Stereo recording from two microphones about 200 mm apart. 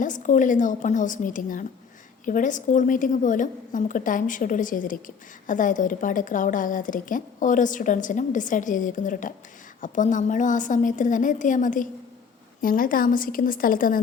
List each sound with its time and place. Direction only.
0.0 s a woman's voice: 40° left (ahead or behind)